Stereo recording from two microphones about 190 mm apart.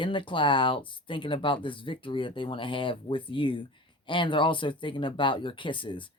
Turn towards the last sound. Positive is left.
turn(degrees=25)  # may be behind; listen again after turning